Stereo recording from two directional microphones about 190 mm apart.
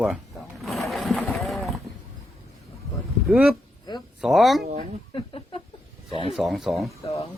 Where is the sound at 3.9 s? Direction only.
25° left (ahead or behind).